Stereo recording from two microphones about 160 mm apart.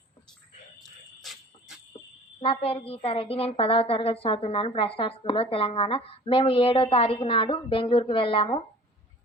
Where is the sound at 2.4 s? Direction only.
35° left (ahead or behind).